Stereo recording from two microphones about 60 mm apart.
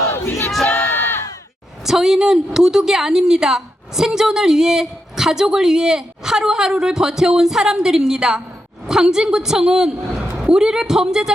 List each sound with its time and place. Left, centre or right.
0.3 s crowd: left
1.8 s a woman's voice: centre